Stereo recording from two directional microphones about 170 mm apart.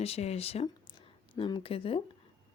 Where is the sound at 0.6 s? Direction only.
30° left (ahead or behind).